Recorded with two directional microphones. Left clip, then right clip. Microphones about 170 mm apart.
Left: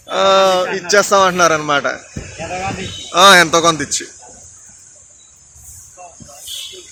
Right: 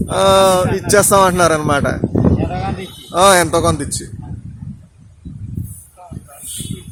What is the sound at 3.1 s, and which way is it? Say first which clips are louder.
Speech: left 3 dB; 25° right (ahead or behind).